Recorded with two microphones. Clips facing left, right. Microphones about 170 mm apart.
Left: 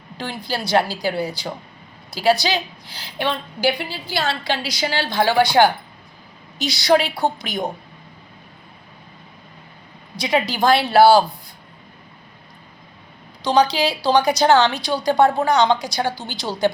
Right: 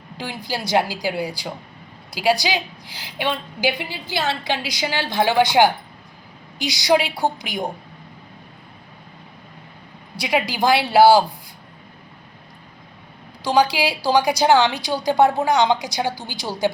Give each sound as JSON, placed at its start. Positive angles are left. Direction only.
{"t": 0.2, "sound": "a woman's voice", "side_deg": -15}
{"t": 10.2, "sound": "a woman's voice", "side_deg": -10}
{"t": 13.4, "sound": "a woman's voice", "side_deg": -10}